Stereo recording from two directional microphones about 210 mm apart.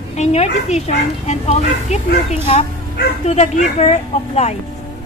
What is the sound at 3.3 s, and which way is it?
Speech, 30° left (ahead or behind).